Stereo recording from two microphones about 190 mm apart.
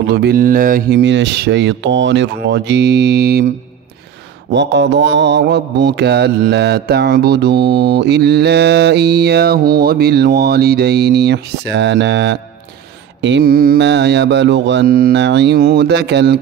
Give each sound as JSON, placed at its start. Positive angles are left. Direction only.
{"t": 0.0, "sound": "mantra", "side_deg": -60}
{"t": 4.5, "sound": "mantra", "side_deg": -65}